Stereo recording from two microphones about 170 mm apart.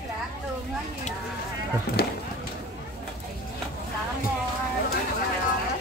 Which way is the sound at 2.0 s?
65° left (ahead or behind).